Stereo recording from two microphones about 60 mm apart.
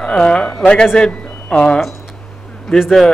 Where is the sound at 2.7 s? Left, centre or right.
Centre.